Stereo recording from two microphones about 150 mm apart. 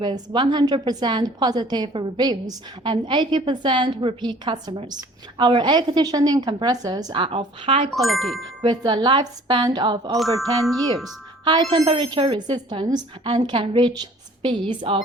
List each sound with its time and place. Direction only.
0.0 s a woman's voice: 30° right (ahead or behind)
7.9 s speech: centre (ahead or behind)
8.6 s a woman's voice: 30° right (ahead or behind)
10.6 s speech: centre (ahead or behind)
11.4 s a woman's voice: 30° right (ahead or behind)